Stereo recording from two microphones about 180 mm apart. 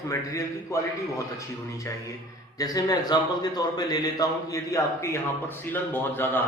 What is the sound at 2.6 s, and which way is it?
A man's voice, 20° left (ahead or behind).